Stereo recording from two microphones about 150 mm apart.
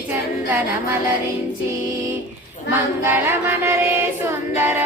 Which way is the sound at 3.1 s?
15° right (ahead or behind).